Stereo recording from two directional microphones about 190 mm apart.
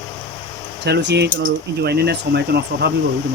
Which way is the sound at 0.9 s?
60° right (ahead or behind).